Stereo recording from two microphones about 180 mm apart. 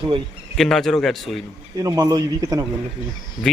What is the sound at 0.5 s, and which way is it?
Speech, centre (ahead or behind).